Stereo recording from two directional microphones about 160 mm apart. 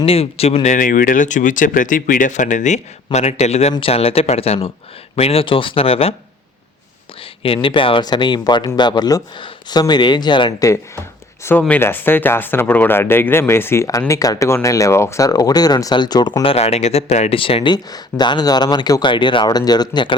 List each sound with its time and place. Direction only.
0.0 s speech: 35° left (ahead or behind)
7.4 s speech: 35° left (ahead or behind)
11.4 s speech: 15° left (ahead or behind)